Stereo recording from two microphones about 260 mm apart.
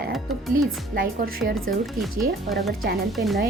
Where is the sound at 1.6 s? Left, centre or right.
Centre.